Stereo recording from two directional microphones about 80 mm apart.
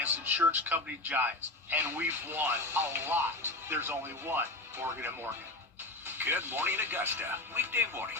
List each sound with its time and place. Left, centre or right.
0.0 s music: right
0.6 s speech: right
6.1 s speech: right